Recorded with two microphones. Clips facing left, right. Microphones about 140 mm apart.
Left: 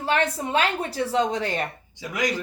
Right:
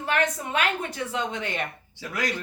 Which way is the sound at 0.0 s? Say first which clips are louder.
Left 2 dB; 30° left (ahead or behind).